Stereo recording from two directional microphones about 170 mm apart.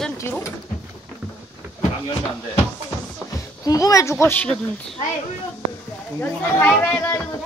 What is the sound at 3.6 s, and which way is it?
Speech, 20° left (ahead or behind).